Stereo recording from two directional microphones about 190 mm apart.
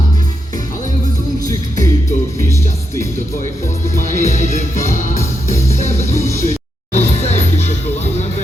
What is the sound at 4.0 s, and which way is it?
Music, 40° left (ahead or behind).